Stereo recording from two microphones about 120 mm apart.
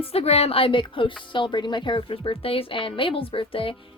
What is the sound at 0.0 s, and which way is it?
A woman's voice, 55° left (ahead or behind).